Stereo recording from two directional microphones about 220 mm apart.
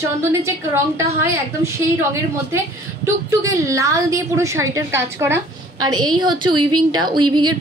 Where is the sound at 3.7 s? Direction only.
15° right (ahead or behind).